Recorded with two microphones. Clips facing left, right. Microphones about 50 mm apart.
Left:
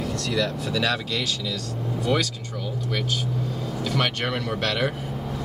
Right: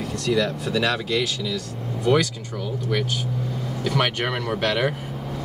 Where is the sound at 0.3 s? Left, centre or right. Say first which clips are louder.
Right 5 dB; centre.